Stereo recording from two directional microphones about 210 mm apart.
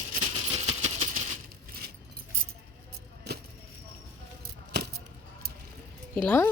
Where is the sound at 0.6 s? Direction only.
30° right (ahead or behind).